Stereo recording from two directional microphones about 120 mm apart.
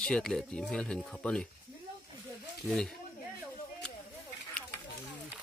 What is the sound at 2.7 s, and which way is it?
Speech, 5° right (ahead or behind).